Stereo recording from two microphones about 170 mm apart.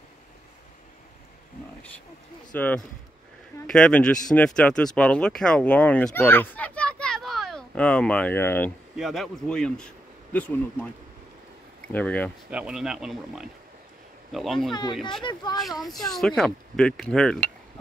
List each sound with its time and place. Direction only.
2.5 s speech: 10° left (ahead or behind)
8.9 s speech: centre (ahead or behind)
11.9 s speech: 10° left (ahead or behind)
12.4 s speech: 5° right (ahead or behind)
14.7 s speech: 25° left (ahead or behind)
15.6 s speech: centre (ahead or behind)